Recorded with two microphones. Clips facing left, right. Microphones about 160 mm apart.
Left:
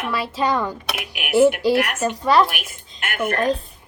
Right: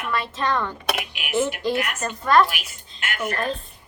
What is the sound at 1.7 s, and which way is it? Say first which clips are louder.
Speech: left 5 dB; 60° left (ahead or behind).